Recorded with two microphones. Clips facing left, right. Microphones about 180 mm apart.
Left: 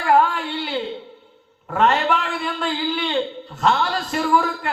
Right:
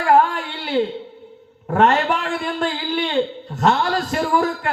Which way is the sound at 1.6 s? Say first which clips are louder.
Right 2 dB; 45° right (ahead or behind).